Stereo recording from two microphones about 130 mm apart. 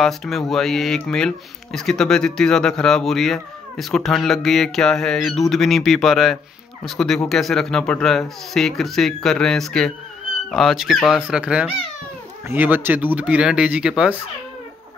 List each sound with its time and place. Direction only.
0.0 s speech: 5° left (ahead or behind)